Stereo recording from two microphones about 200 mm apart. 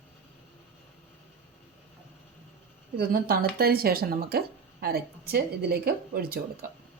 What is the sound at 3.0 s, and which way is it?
A woman's voice, 50° right (ahead or behind).